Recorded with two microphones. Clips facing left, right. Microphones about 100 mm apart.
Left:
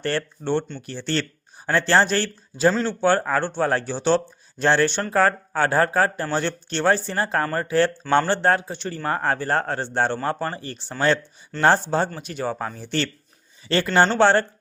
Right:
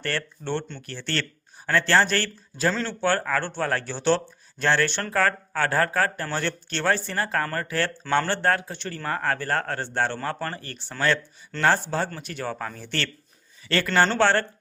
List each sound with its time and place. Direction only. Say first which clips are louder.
0.0 s speech: left 5 dB; 20° left (ahead or behind)